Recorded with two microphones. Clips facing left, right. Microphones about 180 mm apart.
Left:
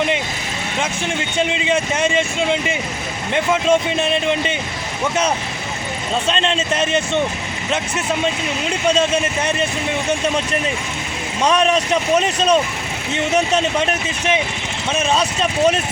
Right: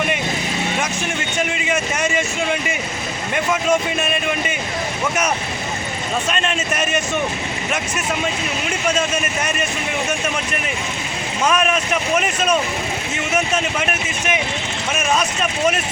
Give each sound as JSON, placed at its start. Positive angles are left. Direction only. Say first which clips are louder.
{"t": 1.4, "sound": "speech", "louder": "left 3 dB", "side_deg": 25}
{"t": 6.2, "sound": "speech", "louder": "left 3 dB", "side_deg": 25}
{"t": 9.1, "sound": "speech", "louder": "left 3 dB", "side_deg": 30}
{"t": 11.6, "sound": "speech", "louder": "left 3 dB", "side_deg": 30}
{"t": 14.9, "sound": "speech", "louder": "left 2 dB", "side_deg": 30}